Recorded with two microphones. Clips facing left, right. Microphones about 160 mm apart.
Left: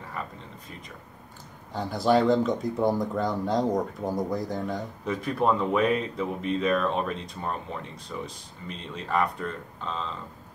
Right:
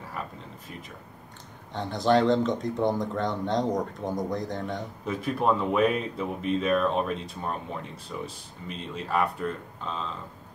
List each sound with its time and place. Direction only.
1.7 s speech: 5° left (ahead or behind)